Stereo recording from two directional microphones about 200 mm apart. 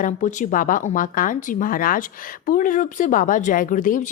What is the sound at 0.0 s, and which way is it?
Speech, 40° left (ahead or behind).